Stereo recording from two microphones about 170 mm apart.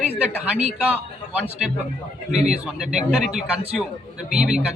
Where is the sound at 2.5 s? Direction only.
5° right (ahead or behind).